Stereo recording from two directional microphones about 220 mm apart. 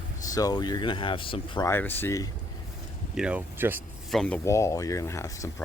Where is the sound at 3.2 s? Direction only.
5° right (ahead or behind).